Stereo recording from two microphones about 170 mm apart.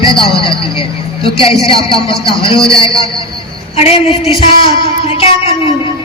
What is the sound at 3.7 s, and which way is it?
A woman's voice, 35° left (ahead or behind).